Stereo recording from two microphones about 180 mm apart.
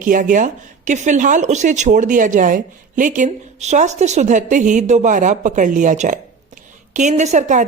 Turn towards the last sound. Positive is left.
turn(degrees=-40)  # may be behind; listen again after turning